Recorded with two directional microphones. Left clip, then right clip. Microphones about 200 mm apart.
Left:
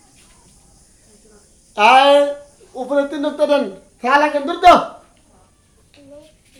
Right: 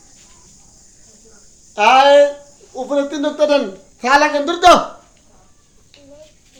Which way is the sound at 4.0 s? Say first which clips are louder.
Right 2 dB; 30° right (ahead or behind).